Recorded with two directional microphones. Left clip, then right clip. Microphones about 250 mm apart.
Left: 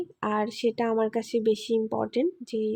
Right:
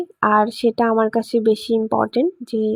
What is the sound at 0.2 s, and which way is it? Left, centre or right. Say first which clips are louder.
Speech: right 12 dB; centre.